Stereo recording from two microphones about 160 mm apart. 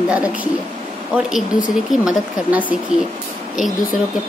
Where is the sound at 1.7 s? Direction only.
Centre (ahead or behind).